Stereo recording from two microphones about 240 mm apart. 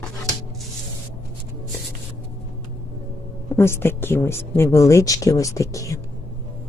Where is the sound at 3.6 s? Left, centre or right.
Centre.